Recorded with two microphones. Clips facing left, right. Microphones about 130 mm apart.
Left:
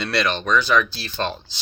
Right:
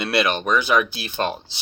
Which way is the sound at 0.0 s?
10° right (ahead or behind).